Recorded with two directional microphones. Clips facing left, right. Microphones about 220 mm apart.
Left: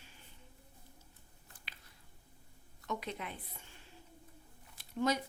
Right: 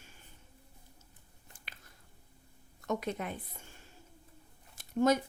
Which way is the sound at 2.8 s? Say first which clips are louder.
Right 6 dB; 45° right (ahead or behind).